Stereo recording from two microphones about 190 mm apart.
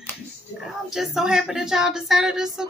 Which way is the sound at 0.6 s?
Centre (ahead or behind).